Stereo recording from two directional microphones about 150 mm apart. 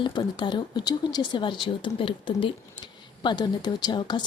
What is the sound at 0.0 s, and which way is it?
Speech, 30° left (ahead or behind).